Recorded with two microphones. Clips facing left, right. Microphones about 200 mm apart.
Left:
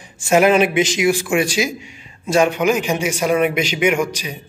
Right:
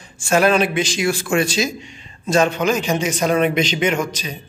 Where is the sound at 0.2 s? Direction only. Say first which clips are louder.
Left 2 dB; 20° left (ahead or behind).